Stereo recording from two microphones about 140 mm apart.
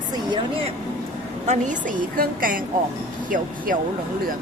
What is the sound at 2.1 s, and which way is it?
Speech, 85° right.